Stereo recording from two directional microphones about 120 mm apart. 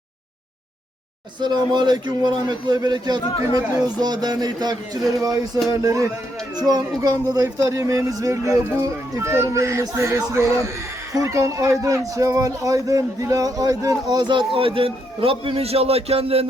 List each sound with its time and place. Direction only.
1.4 s a man's voice: 35° right (ahead or behind); by 16.5 s 55° right (ahead or behind)